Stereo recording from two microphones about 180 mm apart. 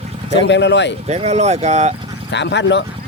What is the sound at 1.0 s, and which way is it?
Speech, 35° right (ahead or behind).